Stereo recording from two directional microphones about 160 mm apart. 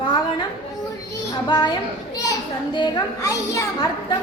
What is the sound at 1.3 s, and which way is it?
Speech, 30° left (ahead or behind).